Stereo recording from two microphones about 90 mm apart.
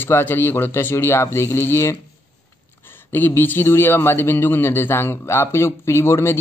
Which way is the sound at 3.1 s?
20° left (ahead or behind).